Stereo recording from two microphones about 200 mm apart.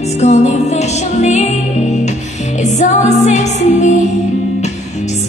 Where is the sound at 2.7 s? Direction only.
35° left (ahead or behind).